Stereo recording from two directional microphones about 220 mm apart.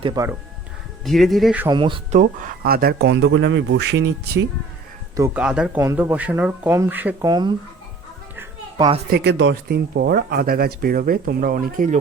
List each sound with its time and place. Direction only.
0.0 s speech: 20° right (ahead or behind)
1.0 s speech: centre (ahead or behind)
1.6 s speech: 20° right (ahead or behind)
2.1 s speech: 40° right (ahead or behind)
5.1 s speech: 10° right (ahead or behind)
9.0 s speech: 50° right (ahead or behind)